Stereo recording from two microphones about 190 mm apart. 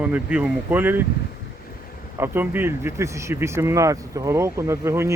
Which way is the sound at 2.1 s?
10° right (ahead or behind).